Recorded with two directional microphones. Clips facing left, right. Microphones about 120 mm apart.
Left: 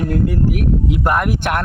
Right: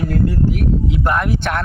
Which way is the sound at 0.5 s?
60° left (ahead or behind).